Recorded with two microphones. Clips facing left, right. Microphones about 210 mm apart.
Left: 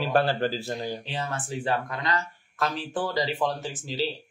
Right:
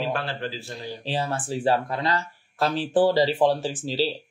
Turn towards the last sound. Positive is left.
turn(degrees=-30)  # may be behind; listen again after turning